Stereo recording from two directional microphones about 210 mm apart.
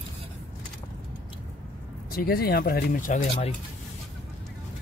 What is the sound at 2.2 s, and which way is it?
Speech, 45° left (ahead or behind).